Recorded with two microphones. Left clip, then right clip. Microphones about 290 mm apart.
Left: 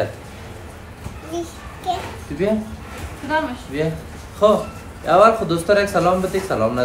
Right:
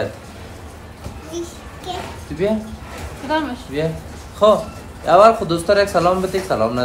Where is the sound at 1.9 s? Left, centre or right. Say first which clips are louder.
Left 5 dB; centre.